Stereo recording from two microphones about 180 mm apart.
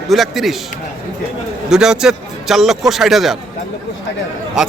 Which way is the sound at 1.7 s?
5° right (ahead or behind).